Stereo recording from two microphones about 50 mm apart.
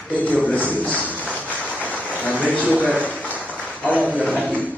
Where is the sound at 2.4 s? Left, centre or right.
Left.